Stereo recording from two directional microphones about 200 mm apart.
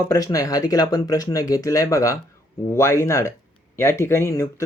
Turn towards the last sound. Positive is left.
turn(degrees=15)  # may be behind; listen again after turning